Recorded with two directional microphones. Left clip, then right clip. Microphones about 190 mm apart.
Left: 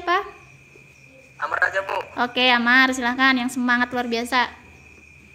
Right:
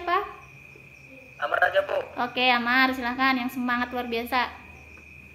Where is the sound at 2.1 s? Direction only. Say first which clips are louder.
Left 5 dB; 50° left (ahead or behind).